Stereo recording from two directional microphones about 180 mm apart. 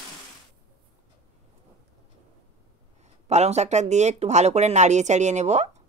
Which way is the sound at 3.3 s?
40° right (ahead or behind).